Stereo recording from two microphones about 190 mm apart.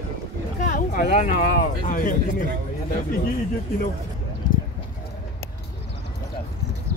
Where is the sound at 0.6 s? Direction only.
45° left (ahead or behind).